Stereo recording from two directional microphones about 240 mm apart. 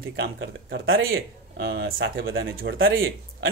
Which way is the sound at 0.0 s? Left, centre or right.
Right.